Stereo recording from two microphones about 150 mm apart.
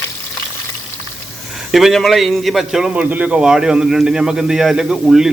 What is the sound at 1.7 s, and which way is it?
A man's voice, centre (ahead or behind).